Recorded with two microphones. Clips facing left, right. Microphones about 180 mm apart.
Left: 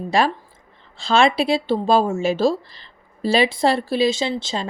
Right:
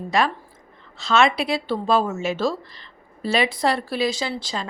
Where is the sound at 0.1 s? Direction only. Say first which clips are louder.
Left 2 dB; 30° left (ahead or behind).